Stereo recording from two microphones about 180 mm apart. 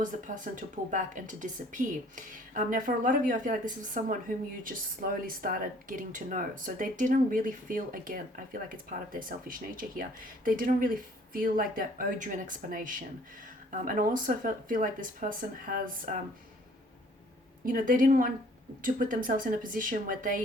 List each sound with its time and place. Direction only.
0.0 s speech: 45° right (ahead or behind)
17.7 s speech: 50° right (ahead or behind)